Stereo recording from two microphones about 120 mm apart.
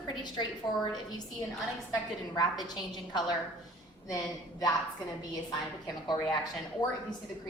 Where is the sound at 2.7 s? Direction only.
35° left (ahead or behind).